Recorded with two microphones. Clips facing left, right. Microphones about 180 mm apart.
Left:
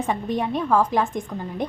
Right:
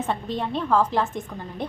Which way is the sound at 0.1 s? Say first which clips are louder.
Left 5 dB; 15° left (ahead or behind).